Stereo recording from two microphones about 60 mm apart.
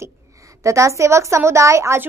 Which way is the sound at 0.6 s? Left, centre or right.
Right.